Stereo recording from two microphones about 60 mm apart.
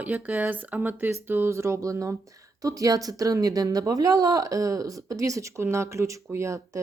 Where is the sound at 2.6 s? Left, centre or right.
Right.